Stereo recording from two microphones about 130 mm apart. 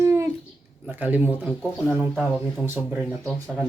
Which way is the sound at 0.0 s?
20° right (ahead or behind).